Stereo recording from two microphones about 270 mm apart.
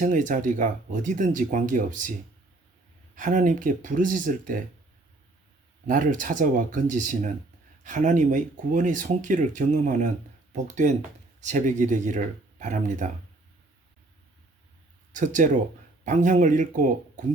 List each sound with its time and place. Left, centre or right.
0.0 s speech: right
3.2 s speech: right
5.9 s speech: right
15.1 s speech: right